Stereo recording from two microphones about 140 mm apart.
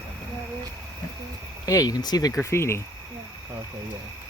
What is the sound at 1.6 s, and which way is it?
Speech, 25° left (ahead or behind).